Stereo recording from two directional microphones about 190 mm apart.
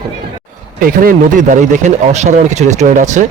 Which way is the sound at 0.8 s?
50° right (ahead or behind).